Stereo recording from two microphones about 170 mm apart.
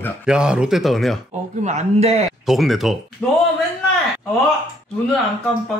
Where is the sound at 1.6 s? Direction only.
45° right (ahead or behind).